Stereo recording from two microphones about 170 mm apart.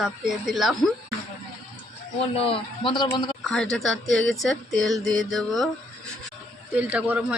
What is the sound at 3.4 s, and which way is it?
Speech, 5° left (ahead or behind).